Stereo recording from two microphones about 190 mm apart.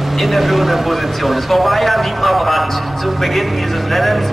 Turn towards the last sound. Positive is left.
turn(degrees=0)  # may be behind; listen again after turning